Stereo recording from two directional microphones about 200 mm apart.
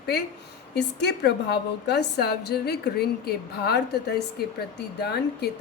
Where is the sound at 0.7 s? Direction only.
55° left (ahead or behind).